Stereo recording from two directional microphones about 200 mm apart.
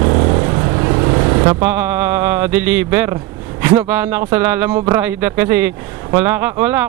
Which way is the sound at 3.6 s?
10° right (ahead or behind).